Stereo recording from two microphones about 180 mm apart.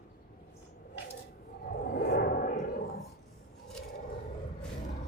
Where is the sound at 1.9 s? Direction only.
55° left (ahead or behind).